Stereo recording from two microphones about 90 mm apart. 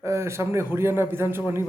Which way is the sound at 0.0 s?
30° right (ahead or behind).